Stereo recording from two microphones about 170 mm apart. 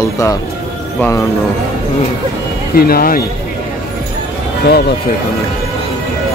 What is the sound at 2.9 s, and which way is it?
Speech, 60° left (ahead or behind).